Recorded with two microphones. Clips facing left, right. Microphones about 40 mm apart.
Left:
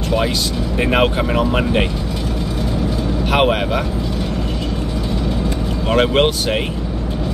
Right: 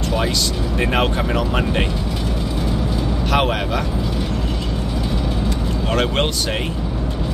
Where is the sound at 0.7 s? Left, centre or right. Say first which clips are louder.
Left 4 dB; centre.